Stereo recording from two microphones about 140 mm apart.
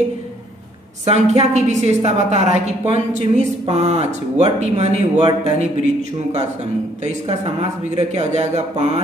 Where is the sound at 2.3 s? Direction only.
60° left (ahead or behind).